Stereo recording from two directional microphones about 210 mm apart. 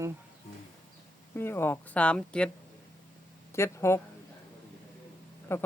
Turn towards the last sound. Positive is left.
turn(degrees=10)  # may be behind; listen again after turning